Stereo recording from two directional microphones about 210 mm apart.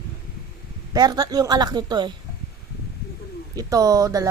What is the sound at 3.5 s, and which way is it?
Speech, 15° right (ahead or behind).